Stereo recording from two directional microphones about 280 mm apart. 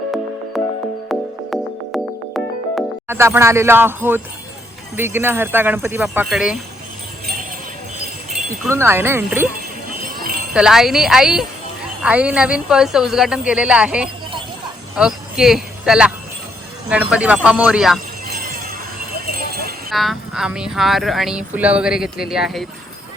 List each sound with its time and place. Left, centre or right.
0.5 s music: centre
4.9 s speech: centre
8.6 s speech: centre
10.5 s speech: centre
19.4 s clip-clop: right
19.9 s speech: centre